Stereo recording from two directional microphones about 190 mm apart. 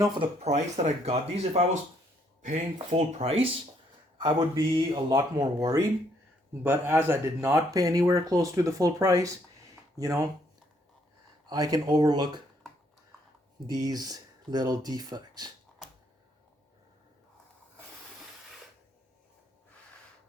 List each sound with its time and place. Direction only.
0.0 s speech: 25° right (ahead or behind)
11.4 s speech: 20° right (ahead or behind)
13.7 s speech: 20° right (ahead or behind)